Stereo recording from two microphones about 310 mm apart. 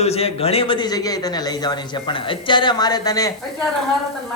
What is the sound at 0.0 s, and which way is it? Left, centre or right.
A man's voice, centre.